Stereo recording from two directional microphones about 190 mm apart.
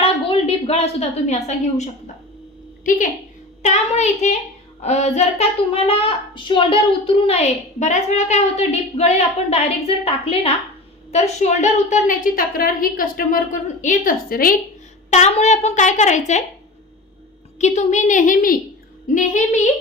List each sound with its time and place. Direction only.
0.0 s a woman's voice: 30° left (ahead or behind)
3.6 s a child's voice: 35° left (ahead or behind)
15.1 s a child's voice: 35° left (ahead or behind)
17.6 s a child's voice: 35° left (ahead or behind)